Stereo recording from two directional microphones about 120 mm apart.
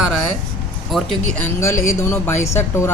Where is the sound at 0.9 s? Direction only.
Centre (ahead or behind).